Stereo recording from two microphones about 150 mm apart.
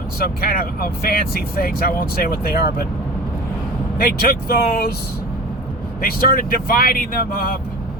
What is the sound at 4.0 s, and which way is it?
Speech, 75° left (ahead or behind).